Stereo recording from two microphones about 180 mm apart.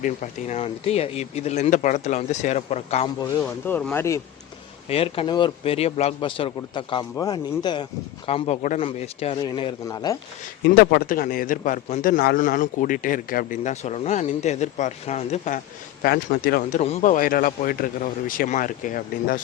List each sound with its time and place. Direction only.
0.0 s speech: 40° left (ahead or behind)
3.4 s speech: 5° left (ahead or behind)
4.9 s a man's voice: 30° left (ahead or behind)
8.3 s speech: 35° left (ahead or behind)
8.8 s a man's voice: 30° left (ahead or behind)
10.8 s a man's voice: 55° left (ahead or behind)